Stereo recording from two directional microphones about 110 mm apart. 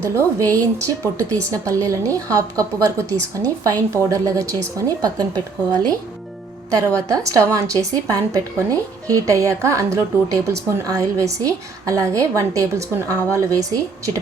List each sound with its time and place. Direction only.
0.0 s a woman's voice: 30° right (ahead or behind)
6.7 s a woman's voice: 30° right (ahead or behind)